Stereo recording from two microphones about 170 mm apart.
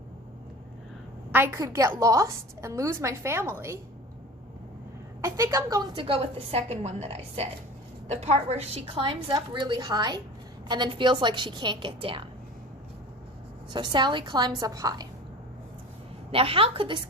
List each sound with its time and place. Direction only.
1.3 s a woman's voice: 15° right (ahead or behind)
5.2 s a woman's voice: 20° right (ahead or behind)
13.7 s a woman's voice: 25° right (ahead or behind)
16.3 s a woman's voice: 35° right (ahead or behind)